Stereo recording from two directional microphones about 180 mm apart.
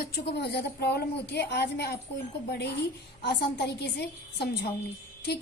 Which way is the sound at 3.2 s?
65° left (ahead or behind).